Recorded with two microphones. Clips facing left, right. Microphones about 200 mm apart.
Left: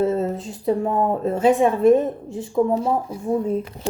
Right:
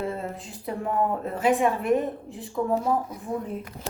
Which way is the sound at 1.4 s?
25° left (ahead or behind).